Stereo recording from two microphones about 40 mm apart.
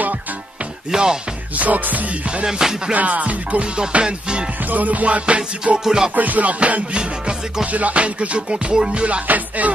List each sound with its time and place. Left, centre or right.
0.9 s music: centre
1.6 s music: right
4.0 s music: right
4.6 s music: right
5.9 s music: centre
6.1 s music: right
7.7 s music: right
9.3 s music: right